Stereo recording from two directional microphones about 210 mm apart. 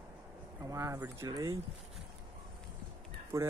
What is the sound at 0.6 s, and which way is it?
Speech, 15° right (ahead or behind).